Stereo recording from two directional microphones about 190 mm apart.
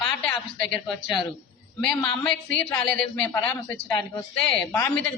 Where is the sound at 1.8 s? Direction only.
10° left (ahead or behind).